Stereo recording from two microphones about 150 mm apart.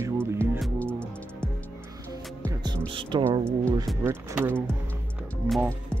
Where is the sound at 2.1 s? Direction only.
25° right (ahead or behind).